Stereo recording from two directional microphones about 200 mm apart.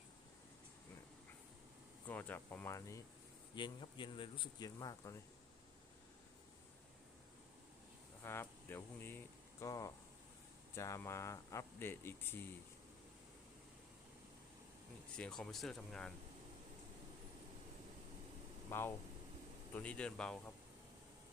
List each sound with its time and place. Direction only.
2.0 s speech: 10° left (ahead or behind)
8.2 s speech: 10° left (ahead or behind)
15.1 s speech: 5° left (ahead or behind)
18.7 s speech: 10° left (ahead or behind)